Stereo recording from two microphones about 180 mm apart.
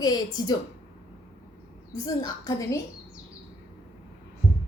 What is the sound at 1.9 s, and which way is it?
Speech, 20° left (ahead or behind).